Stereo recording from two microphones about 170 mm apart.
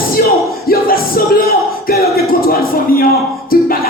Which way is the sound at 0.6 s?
60° left (ahead or behind).